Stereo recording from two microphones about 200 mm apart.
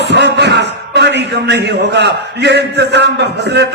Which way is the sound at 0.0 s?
60° right (ahead or behind).